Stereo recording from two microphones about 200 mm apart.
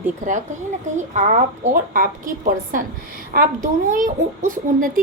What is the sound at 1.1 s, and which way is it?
A woman's voice, 35° right (ahead or behind).